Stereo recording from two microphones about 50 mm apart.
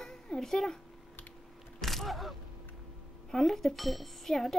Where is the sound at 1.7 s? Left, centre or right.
Centre.